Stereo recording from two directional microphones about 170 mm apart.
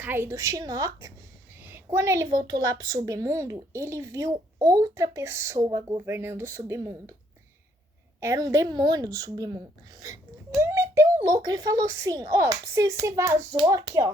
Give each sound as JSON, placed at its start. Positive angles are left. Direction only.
{"t": 0.0, "sound": "a child's voice", "side_deg": -15}
{"t": 8.2, "sound": "a child's voice", "side_deg": -20}